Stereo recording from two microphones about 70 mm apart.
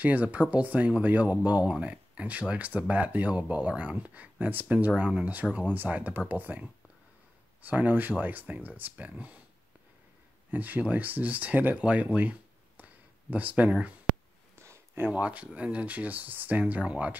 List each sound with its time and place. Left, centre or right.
0.0 s speech: right
7.6 s speech: right
10.5 s speech: right
14.5 s a sound: right
15.0 s speech: centre